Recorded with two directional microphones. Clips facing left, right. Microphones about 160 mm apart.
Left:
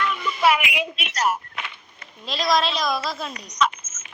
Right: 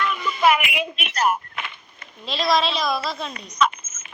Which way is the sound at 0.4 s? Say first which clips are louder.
Right 1 dB; 50° right (ahead or behind).